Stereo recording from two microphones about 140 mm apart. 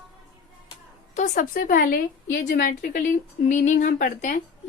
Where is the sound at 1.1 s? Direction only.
60° left (ahead or behind).